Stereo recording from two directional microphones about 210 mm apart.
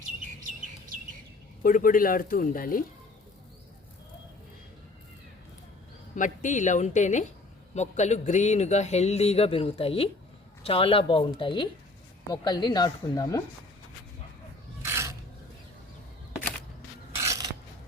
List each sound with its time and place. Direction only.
1.6 s speech: 40° left (ahead or behind)
6.1 s speech: 35° left (ahead or behind); by 13.4 s 20° left (ahead or behind)
14.8 s filing: 10° right (ahead or behind)
17.2 s filing: 15° right (ahead or behind)